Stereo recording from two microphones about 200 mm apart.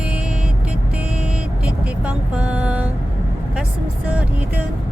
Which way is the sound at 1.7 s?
5° right (ahead or behind).